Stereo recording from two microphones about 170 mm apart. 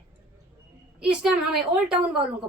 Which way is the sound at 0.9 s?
5° right (ahead or behind).